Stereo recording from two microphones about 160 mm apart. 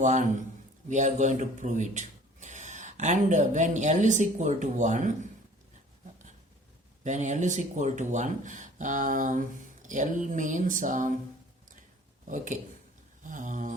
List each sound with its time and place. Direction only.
0.0 s speech: 50° right (ahead or behind)
7.0 s speech: 50° right (ahead or behind)
13.2 s speech: 55° right (ahead or behind)